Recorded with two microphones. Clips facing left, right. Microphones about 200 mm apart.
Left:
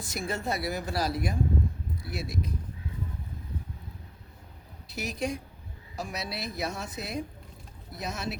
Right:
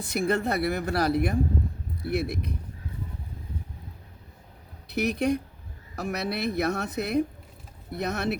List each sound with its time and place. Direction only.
0.0 s speech: 60° right (ahead or behind)
4.9 s speech: 60° right (ahead or behind)